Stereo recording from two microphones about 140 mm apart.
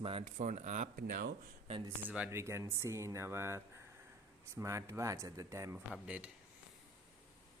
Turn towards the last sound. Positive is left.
turn(degrees=-10)  # may be behind; listen again after turning